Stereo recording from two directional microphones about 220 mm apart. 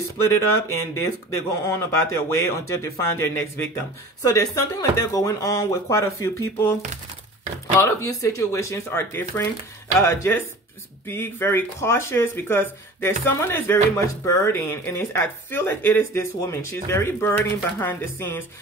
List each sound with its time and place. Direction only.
0.3 s speech: 15° left (ahead or behind)
7.8 s speech: 15° left (ahead or behind)